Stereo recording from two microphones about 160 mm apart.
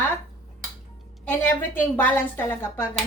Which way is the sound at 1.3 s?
10° left (ahead or behind).